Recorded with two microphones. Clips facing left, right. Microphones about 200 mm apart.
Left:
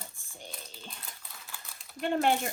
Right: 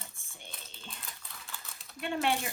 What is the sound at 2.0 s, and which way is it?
Speech, 45° left (ahead or behind).